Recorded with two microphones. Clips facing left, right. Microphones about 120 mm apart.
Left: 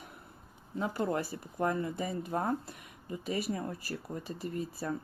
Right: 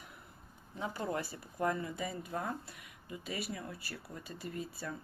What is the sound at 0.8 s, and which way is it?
Speech, 45° left (ahead or behind).